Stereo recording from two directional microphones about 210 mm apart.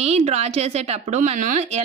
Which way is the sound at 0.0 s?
30° right (ahead or behind).